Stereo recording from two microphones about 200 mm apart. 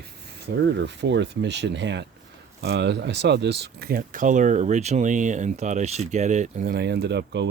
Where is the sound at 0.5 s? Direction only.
60° right (ahead or behind).